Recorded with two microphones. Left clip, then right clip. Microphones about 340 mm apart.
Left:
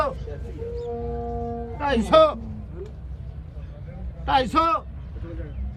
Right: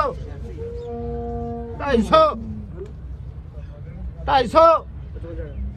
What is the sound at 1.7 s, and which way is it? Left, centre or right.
Speech, centre.